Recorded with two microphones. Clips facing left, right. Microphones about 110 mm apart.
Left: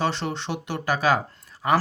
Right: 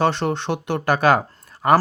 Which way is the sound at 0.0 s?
55° right (ahead or behind).